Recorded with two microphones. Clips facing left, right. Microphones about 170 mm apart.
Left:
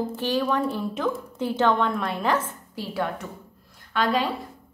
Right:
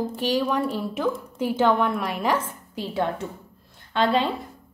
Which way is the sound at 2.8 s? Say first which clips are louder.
Right 3 dB; 25° right (ahead or behind).